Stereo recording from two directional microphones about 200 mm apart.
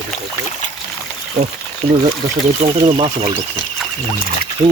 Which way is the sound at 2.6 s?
30° right (ahead or behind).